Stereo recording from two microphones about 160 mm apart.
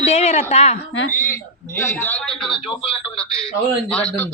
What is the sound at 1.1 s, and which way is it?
A man's voice, 15° left (ahead or behind).